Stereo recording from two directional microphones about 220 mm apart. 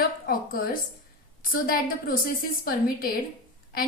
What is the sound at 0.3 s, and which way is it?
A woman's voice, 40° left (ahead or behind).